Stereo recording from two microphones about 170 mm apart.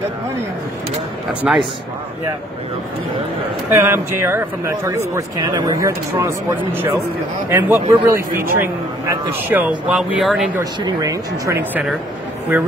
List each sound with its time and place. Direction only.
1.4 s speech: centre (ahead or behind)
3.7 s speech: 15° right (ahead or behind)
10.6 s speech: 25° right (ahead or behind)